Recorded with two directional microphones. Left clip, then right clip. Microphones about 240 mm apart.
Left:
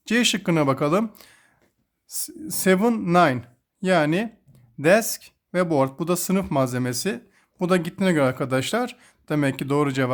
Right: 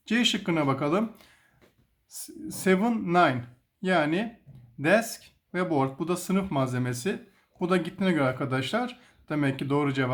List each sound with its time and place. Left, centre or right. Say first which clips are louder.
0.0 s speech: left 4 dB; left